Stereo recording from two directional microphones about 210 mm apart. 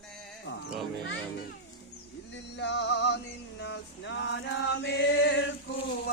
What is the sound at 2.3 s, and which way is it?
Music, 55° left (ahead or behind).